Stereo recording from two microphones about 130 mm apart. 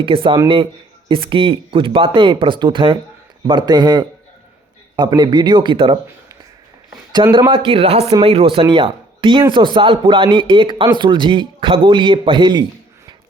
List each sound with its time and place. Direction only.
0.0 s a man's voice: 40° right (ahead or behind)
7.2 s a man's voice: 40° right (ahead or behind)